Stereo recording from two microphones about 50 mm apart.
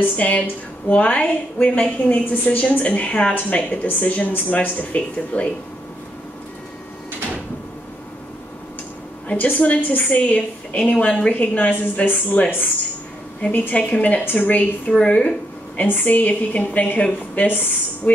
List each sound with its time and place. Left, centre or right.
0.2 s a woman's voice: left
9.3 s a woman's voice: left
14.2 s a woman's voice: left
14.9 s a woman's voice: centre